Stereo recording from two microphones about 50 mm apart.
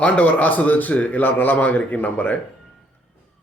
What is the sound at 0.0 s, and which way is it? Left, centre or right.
Speech, left.